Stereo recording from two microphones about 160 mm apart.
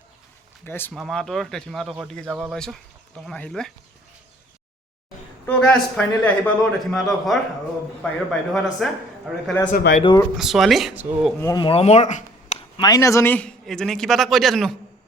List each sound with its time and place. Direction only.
0.6 s a man's voice: 15° left (ahead or behind)
0.9 s a man's voice: centre (ahead or behind)
5.5 s a man's voice: 5° left (ahead or behind)
9.7 s speech: 60° left (ahead or behind)
10.0 s speech: 30° left (ahead or behind)
10.3 s a man's voice: centre (ahead or behind)
11.3 s a man's voice: 20° left (ahead or behind)
11.6 s speech: 35° left (ahead or behind)
12.7 s a man's voice: 25° left (ahead or behind); by 14.8 s centre (ahead or behind)